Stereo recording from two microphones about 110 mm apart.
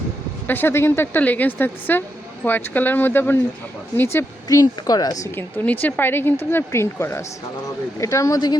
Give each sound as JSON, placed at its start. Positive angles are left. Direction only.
{"t": 0.4, "sound": "a woman's voice", "side_deg": 20}
{"t": 4.4, "sound": "a woman's voice", "side_deg": 35}
{"t": 5.3, "sound": "speech", "side_deg": 20}